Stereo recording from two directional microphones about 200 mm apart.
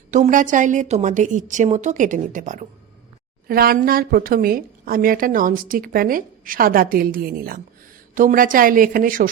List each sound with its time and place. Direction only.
0.1 s a woman's voice: 40° right (ahead or behind)